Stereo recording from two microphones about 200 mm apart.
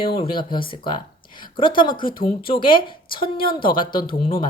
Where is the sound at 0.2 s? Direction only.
25° left (ahead or behind).